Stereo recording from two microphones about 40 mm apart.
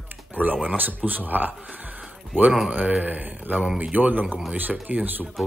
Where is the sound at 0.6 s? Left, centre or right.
Right.